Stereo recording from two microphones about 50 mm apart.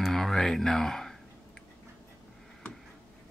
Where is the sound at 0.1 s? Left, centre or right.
Centre.